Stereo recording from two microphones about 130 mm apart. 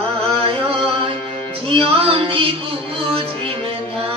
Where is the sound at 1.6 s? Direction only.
45° right (ahead or behind).